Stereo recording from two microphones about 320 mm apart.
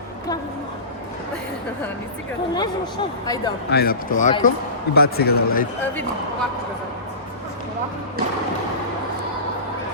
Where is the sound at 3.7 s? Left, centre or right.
Left.